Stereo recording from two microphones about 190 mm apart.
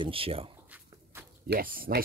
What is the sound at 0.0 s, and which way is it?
Speech, 30° right (ahead or behind).